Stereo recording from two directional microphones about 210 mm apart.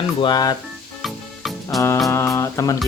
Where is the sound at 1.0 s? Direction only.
Centre (ahead or behind).